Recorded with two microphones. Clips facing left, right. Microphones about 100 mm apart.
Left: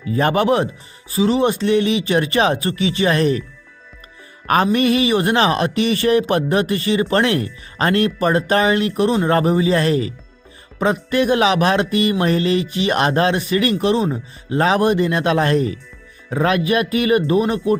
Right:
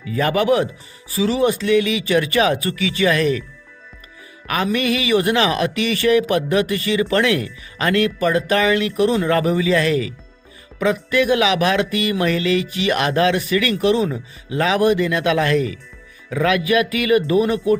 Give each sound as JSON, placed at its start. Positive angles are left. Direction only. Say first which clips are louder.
{"t": 0.0, "sound": "speech", "louder": "left 2 dB", "side_deg": 35}
{"t": 4.4, "sound": "speech", "louder": "left 4 dB", "side_deg": 40}